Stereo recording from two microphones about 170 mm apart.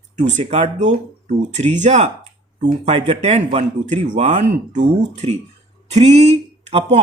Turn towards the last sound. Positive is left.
turn(degrees=-40)  # may be behind; listen again after turning